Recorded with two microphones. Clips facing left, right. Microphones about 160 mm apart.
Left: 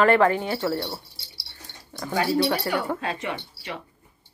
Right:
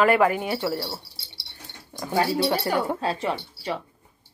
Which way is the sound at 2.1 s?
30° right (ahead or behind).